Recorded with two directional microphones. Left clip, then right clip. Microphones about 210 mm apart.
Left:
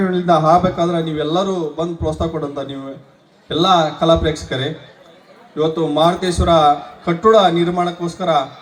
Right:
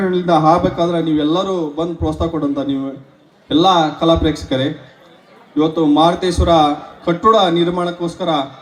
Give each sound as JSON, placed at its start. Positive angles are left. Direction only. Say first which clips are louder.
{"t": 0.1, "sound": "a man's voice", "louder": "even", "side_deg": -55}